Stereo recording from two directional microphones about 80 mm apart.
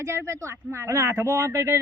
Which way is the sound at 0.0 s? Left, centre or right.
Right.